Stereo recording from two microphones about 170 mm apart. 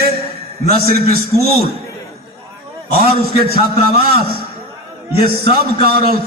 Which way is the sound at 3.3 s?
65° right (ahead or behind).